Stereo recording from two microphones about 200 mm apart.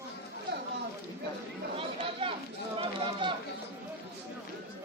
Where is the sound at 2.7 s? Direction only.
25° right (ahead or behind).